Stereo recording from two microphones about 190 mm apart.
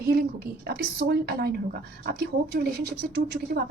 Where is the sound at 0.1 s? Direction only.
60° right (ahead or behind).